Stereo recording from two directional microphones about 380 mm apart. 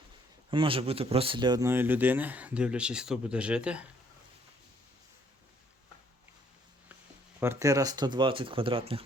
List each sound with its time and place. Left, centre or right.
0.5 s speech: centre
7.3 s speech: centre